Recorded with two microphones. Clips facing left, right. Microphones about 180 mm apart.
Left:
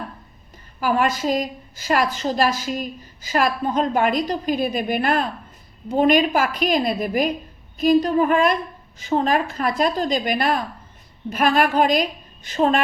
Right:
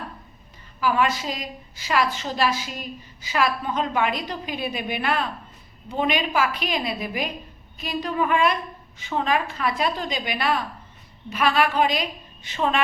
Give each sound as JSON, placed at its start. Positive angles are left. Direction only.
{"t": 0.8, "sound": "a woman's voice", "side_deg": 45}